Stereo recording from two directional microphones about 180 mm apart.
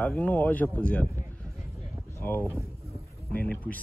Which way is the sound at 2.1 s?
10° left (ahead or behind).